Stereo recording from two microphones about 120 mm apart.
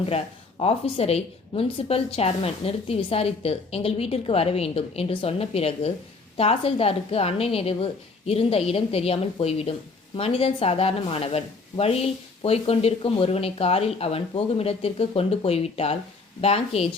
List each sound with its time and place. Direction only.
0.6 s speech: 55° left (ahead or behind)